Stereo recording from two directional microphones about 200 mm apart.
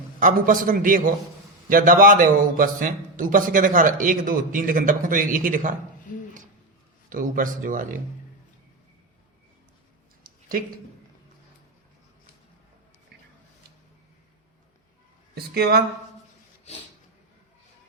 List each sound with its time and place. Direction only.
0.2 s a man's voice: 40° right (ahead or behind)
7.1 s speech: 45° right (ahead or behind)
15.5 s a man's voice: 50° right (ahead or behind)